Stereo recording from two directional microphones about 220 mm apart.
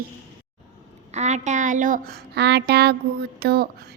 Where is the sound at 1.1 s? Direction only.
30° right (ahead or behind).